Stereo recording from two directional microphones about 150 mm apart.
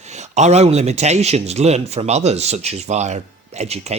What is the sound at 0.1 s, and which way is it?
Speech, 50° right (ahead or behind).